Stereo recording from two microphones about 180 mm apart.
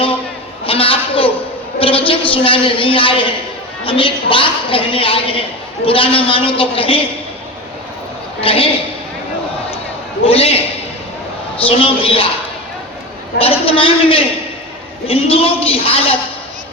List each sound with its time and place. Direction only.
0.6 s a sound: 30° left (ahead or behind)
1.8 s a woman's voice: 30° left (ahead or behind)
8.4 s a man's voice: 30° left (ahead or behind)
10.2 s a man's voice: 30° left (ahead or behind)
11.6 s a man's voice: 30° left (ahead or behind)
13.4 s a man's voice: 30° left (ahead or behind)